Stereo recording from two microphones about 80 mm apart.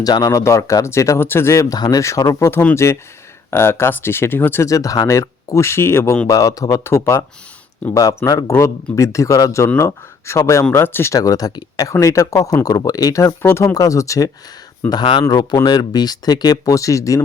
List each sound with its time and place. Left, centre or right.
0.0 s speech: left
1.7 s speech: left
4.6 s speech: left
6.2 s speech: left
6.8 s speech: left
7.9 s speech: left
11.1 s speech: left
12.6 s speech: left
13.4 s speech: left
13.7 s speech: left
14.8 s speech: left
15.3 s speech: left